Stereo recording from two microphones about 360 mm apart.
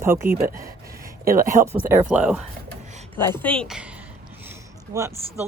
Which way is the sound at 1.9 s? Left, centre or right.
Centre.